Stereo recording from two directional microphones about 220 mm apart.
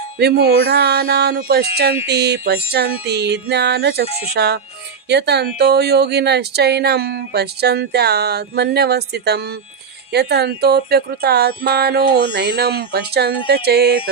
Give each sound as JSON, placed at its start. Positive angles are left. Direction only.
{"t": 0.2, "sound": "speech", "side_deg": -45}